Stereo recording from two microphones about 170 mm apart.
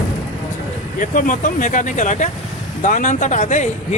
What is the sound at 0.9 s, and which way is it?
Speech, 50° left (ahead or behind).